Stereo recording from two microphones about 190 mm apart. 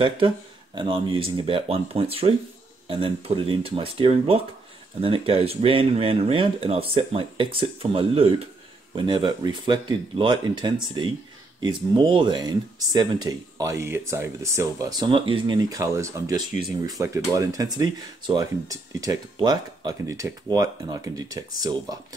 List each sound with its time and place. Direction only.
0.7 s speech: 25° right (ahead or behind)